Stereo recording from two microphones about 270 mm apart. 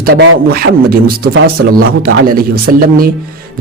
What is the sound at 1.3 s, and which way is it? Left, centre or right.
Speech, right.